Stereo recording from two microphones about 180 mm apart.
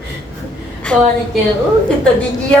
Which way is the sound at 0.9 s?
5° left (ahead or behind).